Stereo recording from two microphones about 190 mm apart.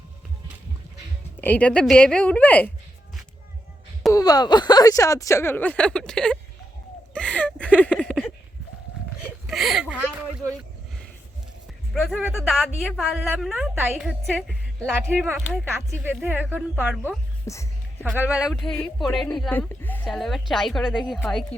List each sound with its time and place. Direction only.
1.4 s speech: 10° left (ahead or behind)
4.1 s speech: 20° left (ahead or behind); by 6.4 s 5° left (ahead or behind)
7.1 s a sound: 5° left (ahead or behind)
9.5 s a sound: centre (ahead or behind)
11.9 s a woman's voice: 5° right (ahead or behind)
17.4 s speech: 15° left (ahead or behind)
18.2 s a woman's voice: 5° right (ahead or behind)